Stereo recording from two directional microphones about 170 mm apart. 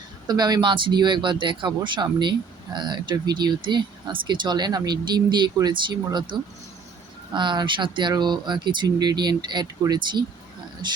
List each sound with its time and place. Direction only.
0.3 s speech: 25° right (ahead or behind)